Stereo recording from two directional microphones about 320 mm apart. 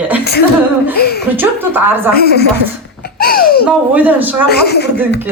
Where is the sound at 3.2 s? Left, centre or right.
Left.